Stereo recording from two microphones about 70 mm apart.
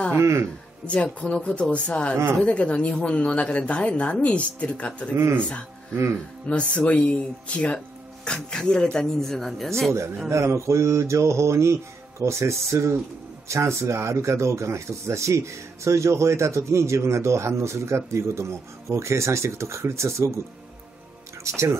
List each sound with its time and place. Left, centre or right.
0.2 s speech: right
0.8 s speech: centre
5.1 s speech: right
6.4 s speech: centre
10.3 s speech: right
21.5 s speech: right